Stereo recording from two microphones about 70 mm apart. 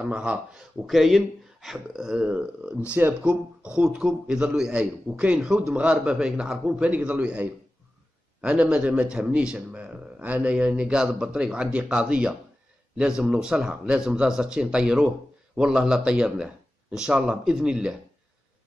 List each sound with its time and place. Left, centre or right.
0.0 s a man's voice: centre
0.8 s a man's voice: centre
6.8 s a man's voice: centre